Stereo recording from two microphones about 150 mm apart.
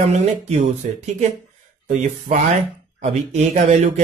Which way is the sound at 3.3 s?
45° right (ahead or behind).